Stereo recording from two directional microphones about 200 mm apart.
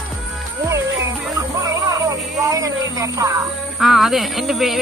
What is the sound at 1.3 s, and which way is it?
Music, 15° right (ahead or behind).